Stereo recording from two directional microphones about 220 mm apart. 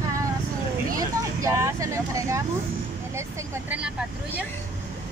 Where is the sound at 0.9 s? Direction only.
15° right (ahead or behind).